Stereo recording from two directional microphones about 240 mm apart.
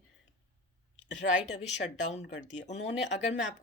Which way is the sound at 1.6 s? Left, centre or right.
Left.